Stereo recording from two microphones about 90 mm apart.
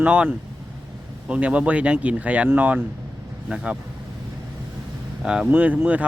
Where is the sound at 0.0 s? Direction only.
15° right (ahead or behind).